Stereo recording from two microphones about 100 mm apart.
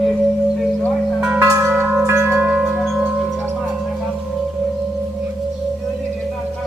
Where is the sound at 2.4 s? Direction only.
10° right (ahead or behind).